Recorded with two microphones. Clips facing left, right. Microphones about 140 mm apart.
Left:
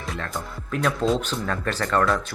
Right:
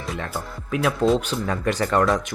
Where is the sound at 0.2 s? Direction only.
5° right (ahead or behind).